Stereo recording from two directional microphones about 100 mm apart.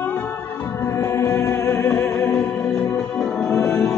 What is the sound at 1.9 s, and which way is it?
Music, 10° left (ahead or behind).